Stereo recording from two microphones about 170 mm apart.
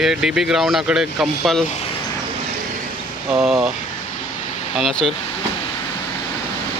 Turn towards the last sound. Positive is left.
turn(degrees=0)  # may be behind; listen again after turning